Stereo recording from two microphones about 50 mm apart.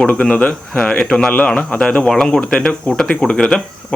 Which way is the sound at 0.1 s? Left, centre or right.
Left.